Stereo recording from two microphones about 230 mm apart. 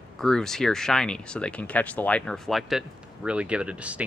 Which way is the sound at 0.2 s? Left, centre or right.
Centre.